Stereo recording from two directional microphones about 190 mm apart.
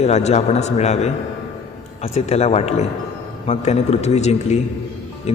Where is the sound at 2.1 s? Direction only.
35° left (ahead or behind).